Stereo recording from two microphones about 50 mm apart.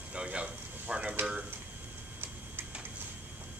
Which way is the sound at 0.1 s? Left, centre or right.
Right.